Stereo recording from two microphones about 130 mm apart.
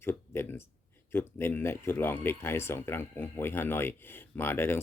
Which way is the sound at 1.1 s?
15° left (ahead or behind).